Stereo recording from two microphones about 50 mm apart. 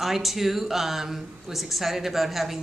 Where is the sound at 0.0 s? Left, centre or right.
Centre.